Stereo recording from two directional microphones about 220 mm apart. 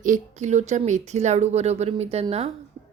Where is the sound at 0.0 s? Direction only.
35° right (ahead or behind).